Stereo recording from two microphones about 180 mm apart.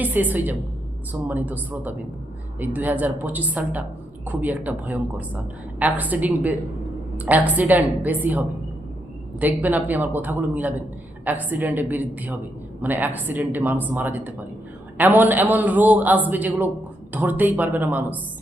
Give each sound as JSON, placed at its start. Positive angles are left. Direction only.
{"t": 0.0, "sound": "a man's voice", "side_deg": -10}